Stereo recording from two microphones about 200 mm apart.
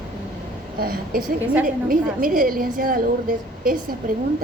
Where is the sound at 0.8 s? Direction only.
50° right (ahead or behind).